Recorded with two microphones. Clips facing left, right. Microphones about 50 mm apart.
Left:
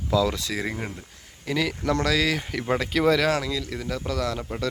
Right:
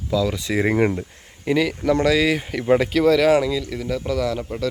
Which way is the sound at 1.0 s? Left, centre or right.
Right.